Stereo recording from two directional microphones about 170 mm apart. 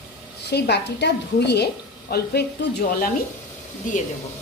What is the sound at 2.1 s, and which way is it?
Speech, 70° left (ahead or behind).